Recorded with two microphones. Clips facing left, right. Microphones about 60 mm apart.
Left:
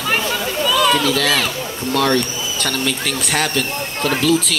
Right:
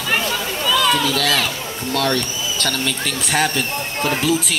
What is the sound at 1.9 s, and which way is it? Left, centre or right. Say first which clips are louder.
Speech: left 3 dB; left.